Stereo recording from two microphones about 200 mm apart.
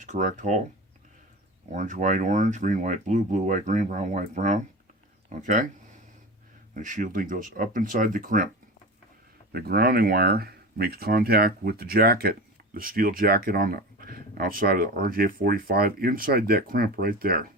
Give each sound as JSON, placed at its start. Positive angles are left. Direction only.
{"t": 0.0, "sound": "speech", "side_deg": -35}
{"t": 1.7, "sound": "speech", "side_deg": -40}
{"t": 6.7, "sound": "speech", "side_deg": -40}
{"t": 9.5, "sound": "speech", "side_deg": -50}